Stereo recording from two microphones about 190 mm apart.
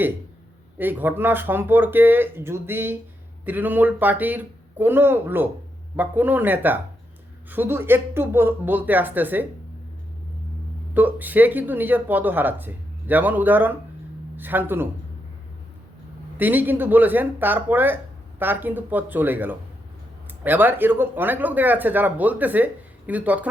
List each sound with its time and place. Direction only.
0.8 s speech: 10° right (ahead or behind)
10.9 s speech: 10° right (ahead or behind)
16.4 s speech: 10° right (ahead or behind)